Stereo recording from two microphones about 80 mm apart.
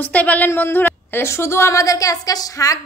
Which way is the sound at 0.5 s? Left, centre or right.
Left.